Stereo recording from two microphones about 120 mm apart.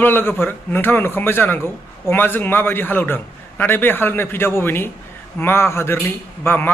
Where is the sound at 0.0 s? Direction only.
15° left (ahead or behind).